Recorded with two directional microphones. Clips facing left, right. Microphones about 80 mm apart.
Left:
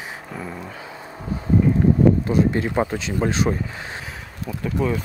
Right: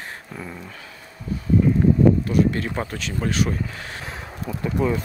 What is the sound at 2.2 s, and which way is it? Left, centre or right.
Speech, left.